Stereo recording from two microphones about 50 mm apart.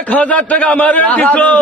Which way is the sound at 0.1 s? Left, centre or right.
Left.